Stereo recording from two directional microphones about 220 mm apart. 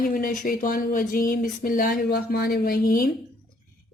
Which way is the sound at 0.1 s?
40° left (ahead or behind).